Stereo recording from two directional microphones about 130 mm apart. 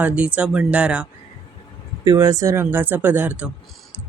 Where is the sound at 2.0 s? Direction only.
25° right (ahead or behind).